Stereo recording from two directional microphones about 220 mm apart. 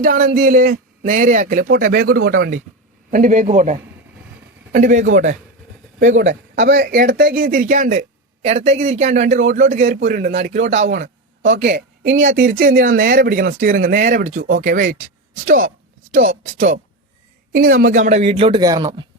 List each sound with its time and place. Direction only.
0.0 s speech: 40° right (ahead or behind)
6.2 s speech: 55° right (ahead or behind); by 10.8 s 35° right (ahead or behind)
10.8 s a woman's voice: 50° right (ahead or behind)
12.1 s a man's voice: 35° right (ahead or behind); by 19.0 s 20° right (ahead or behind)